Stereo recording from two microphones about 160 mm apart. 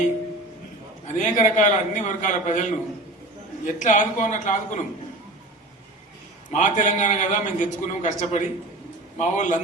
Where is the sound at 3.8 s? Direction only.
50° left (ahead or behind).